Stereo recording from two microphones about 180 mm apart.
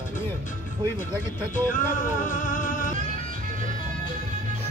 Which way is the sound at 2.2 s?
50° left (ahead or behind).